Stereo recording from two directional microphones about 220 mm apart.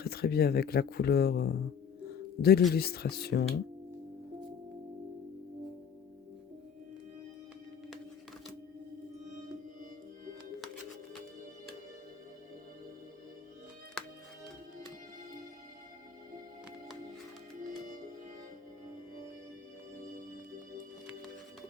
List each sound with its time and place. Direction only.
0.0 s speech: 45° left (ahead or behind)
14.0 s music: centre (ahead or behind)